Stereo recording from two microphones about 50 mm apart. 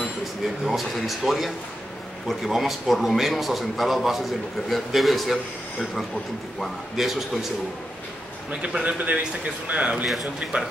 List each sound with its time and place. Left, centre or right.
0.7 s a man's voice: centre
8.5 s a man's voice: right